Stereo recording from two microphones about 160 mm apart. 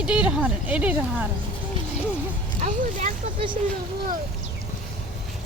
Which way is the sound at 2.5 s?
50° right (ahead or behind).